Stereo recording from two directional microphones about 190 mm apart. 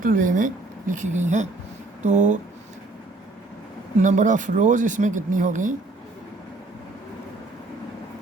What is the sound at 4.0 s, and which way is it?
Speech, 40° right (ahead or behind).